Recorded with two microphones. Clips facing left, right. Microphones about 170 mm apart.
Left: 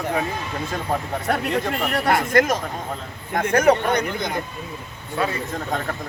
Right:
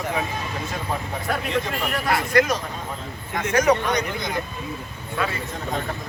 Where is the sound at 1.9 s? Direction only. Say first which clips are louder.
Left 2 dB; 55° left (ahead or behind).